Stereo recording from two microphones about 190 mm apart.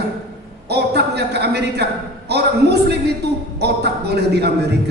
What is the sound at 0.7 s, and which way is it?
A man's voice, 60° right (ahead or behind).